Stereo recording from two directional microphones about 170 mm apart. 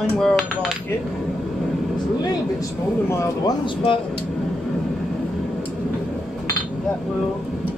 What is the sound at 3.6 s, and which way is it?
Speech, 30° left (ahead or behind).